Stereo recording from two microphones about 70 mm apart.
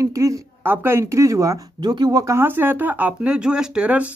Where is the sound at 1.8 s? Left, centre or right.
Right.